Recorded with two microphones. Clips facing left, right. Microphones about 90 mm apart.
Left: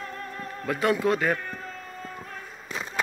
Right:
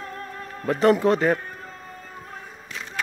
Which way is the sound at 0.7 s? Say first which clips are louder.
Right 5 dB; 30° right (ahead or behind).